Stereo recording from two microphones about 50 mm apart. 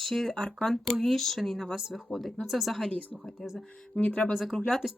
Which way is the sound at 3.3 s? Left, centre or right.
Centre.